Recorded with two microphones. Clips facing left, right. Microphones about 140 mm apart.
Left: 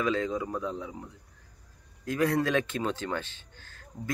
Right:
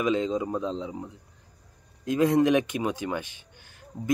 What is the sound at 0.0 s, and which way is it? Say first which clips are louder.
Speech: right 3 dB; 20° right (ahead or behind).